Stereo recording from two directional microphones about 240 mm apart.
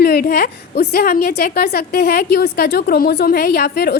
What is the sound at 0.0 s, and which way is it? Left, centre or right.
A woman's voice, left.